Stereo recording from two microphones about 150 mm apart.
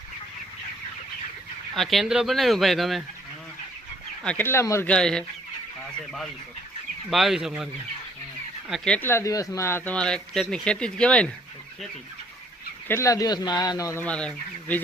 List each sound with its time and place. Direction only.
1.7 s speech: centre (ahead or behind)
4.2 s speech: 10° left (ahead or behind)
4.9 s speech: 5° left (ahead or behind)
7.1 s speech: centre (ahead or behind)
8.7 s speech: 5° left (ahead or behind)
12.9 s speech: 20° left (ahead or behind)
14.0 s speech: 5° left (ahead or behind)